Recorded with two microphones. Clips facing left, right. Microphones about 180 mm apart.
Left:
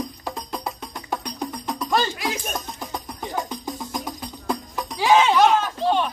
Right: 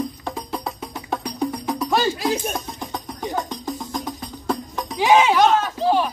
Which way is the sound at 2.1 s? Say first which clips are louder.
Right 5 dB; 30° right (ahead or behind).